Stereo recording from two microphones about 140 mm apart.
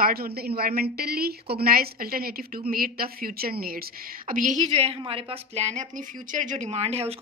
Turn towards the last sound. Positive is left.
turn(degrees=-45)  # may be behind; listen again after turning